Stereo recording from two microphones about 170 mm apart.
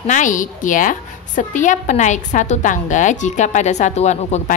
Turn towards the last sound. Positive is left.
turn(degrees=40)  # may be behind; listen again after turning